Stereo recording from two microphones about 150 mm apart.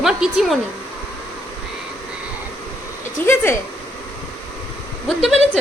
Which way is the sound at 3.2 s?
10° left (ahead or behind).